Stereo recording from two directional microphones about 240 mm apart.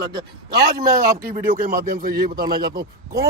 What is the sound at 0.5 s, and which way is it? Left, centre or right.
Speech, right.